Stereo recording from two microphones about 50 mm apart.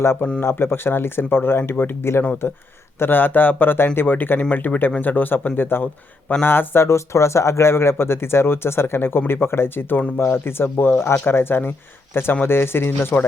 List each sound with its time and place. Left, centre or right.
0.4 s speech: left
6.8 s speech: left